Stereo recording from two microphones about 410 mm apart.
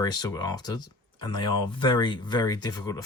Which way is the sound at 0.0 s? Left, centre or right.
Centre.